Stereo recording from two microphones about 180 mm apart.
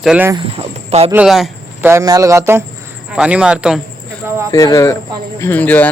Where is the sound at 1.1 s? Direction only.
5° right (ahead or behind).